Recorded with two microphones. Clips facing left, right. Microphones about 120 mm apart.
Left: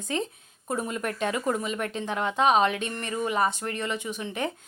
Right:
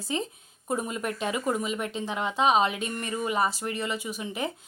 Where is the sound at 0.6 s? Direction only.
10° right (ahead or behind).